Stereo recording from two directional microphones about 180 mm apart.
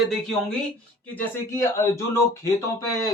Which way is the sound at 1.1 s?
10° left (ahead or behind).